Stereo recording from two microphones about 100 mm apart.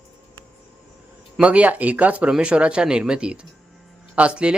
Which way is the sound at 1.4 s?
15° right (ahead or behind).